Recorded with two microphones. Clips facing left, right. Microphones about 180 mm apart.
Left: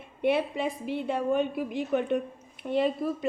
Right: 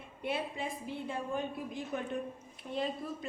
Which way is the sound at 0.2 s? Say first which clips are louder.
Left 10 dB; 70° left (ahead or behind).